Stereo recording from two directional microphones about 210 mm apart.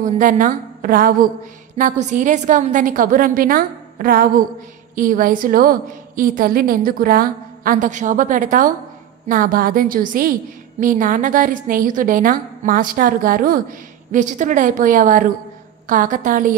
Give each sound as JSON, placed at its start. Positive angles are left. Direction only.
{"t": 0.0, "sound": "a woman's voice", "side_deg": -40}